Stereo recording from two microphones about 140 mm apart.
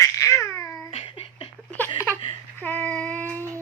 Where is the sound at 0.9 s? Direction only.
40° left (ahead or behind).